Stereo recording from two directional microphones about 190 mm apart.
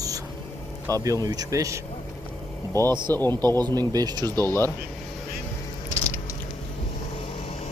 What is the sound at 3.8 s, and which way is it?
Speech, 20° right (ahead or behind).